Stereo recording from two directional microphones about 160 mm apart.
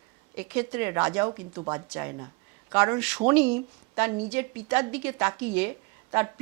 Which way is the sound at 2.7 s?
15° right (ahead or behind).